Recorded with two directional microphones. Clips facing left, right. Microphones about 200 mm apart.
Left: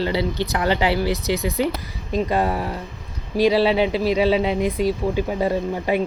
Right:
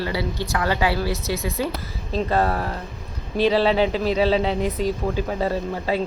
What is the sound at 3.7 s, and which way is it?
Speech, 40° right (ahead or behind).